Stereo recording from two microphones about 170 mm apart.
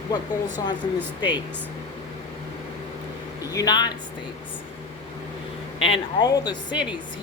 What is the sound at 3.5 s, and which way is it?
Speech, 25° left (ahead or behind).